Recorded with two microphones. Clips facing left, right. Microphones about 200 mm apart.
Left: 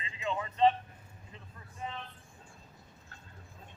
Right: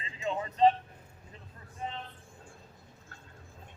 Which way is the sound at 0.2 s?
35° right (ahead or behind).